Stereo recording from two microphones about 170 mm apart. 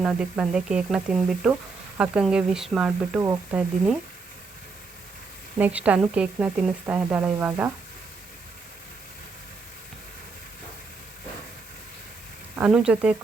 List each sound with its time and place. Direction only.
0.0 s a woman's voice: 5° right (ahead or behind)
5.5 s a woman's voice: 10° right (ahead or behind)
12.5 s speech: 5° right (ahead or behind)